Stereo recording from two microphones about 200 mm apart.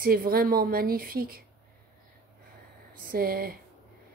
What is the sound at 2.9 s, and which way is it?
Speech, 45° right (ahead or behind).